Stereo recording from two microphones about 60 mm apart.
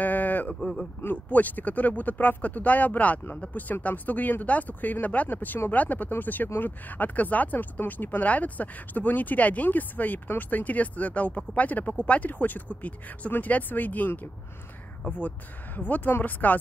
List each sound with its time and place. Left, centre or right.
0.0 s a sound: left
0.6 s speech: centre
1.3 s speech: left